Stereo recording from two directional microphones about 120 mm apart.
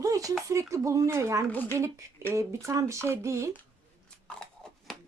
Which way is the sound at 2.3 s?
25° right (ahead or behind).